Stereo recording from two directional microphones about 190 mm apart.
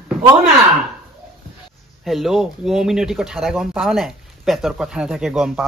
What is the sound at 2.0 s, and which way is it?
Speech, centre (ahead or behind).